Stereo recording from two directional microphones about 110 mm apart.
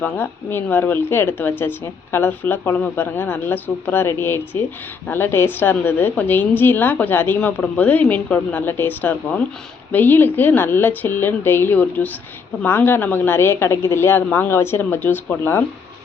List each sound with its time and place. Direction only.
0.0 s a woman's voice: 20° left (ahead or behind)